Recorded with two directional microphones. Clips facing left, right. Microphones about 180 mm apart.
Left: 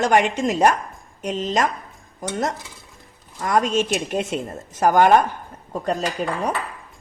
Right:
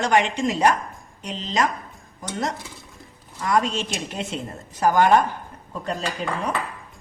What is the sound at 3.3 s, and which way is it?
Speech, 50° left (ahead or behind).